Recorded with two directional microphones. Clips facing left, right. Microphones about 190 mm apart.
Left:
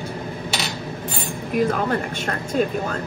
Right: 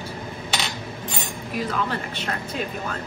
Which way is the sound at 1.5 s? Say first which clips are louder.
Left 6 dB; 50° left (ahead or behind).